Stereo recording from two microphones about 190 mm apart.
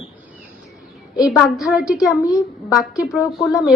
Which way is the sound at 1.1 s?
Centre (ahead or behind).